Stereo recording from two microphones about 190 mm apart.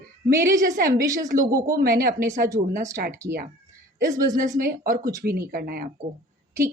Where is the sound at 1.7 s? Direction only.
50° right (ahead or behind).